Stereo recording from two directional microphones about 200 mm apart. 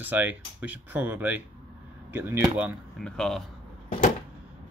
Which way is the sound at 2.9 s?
5° left (ahead or behind).